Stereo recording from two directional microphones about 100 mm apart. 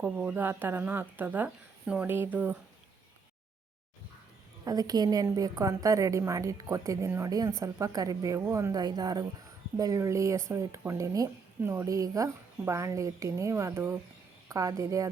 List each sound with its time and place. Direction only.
0.2 s a woman's voice: 15° right (ahead or behind)
4.6 s a woman's voice: 40° right (ahead or behind)
8.7 s a woman's voice: 40° right (ahead or behind)
11.6 s a woman's voice: 25° right (ahead or behind)
14.5 s a woman's voice: 35° right (ahead or behind)